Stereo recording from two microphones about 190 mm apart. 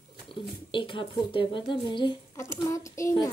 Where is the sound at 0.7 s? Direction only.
25° left (ahead or behind).